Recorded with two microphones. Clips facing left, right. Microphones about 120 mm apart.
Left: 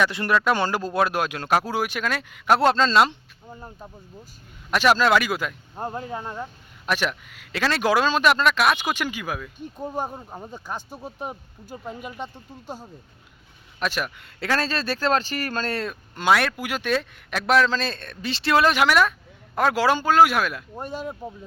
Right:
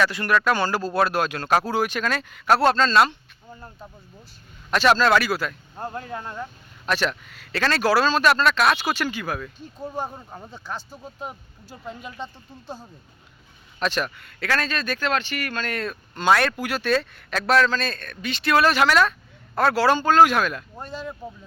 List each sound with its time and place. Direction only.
0.0 s speech: 25° left (ahead or behind)
11.0 s speech: 25° left (ahead or behind)
11.9 s speech: 10° left (ahead or behind)
14.2 s speech: 20° left (ahead or behind)
14.6 s speech: 30° left (ahead or behind)
15.8 s speech: 15° left (ahead or behind)